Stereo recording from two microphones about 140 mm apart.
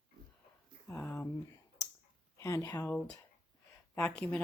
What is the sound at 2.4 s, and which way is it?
Speech, 25° left (ahead or behind).